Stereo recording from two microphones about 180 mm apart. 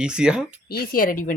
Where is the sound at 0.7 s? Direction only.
55° left (ahead or behind).